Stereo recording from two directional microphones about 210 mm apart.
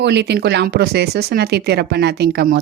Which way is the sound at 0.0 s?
55° right (ahead or behind).